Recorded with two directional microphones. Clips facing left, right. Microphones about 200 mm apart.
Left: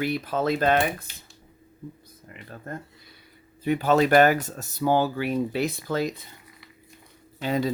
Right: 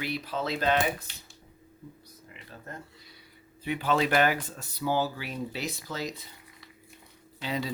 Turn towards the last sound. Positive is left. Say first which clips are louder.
# left 7 dB
turn(degrees=45)  # may be behind; listen again after turning